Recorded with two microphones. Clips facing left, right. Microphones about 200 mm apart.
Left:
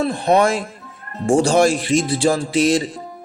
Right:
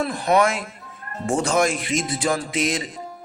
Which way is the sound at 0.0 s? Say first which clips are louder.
Left 3 dB; 30° left (ahead or behind).